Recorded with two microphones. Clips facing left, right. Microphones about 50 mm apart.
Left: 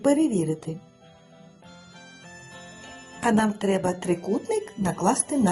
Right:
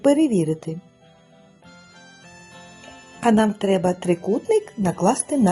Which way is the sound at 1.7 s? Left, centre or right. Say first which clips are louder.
Right 2 dB; right.